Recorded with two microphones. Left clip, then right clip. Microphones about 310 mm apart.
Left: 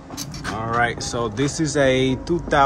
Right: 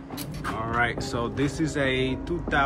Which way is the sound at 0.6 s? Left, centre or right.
Centre.